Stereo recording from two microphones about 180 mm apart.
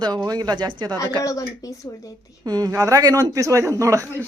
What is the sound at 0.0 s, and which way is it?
Speech, 20° right (ahead or behind).